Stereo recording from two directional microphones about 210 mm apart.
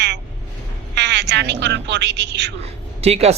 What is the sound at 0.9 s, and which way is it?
Speech, 55° right (ahead or behind).